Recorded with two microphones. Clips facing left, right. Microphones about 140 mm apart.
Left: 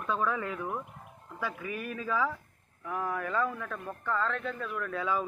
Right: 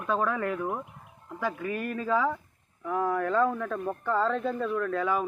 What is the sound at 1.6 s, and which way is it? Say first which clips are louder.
Speech: right 5 dB; 10° left (ahead or behind).